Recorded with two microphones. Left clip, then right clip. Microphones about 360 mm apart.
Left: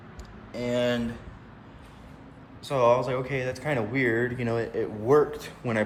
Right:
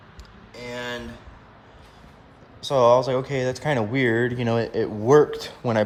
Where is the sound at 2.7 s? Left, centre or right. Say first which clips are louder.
Right 5 dB; centre.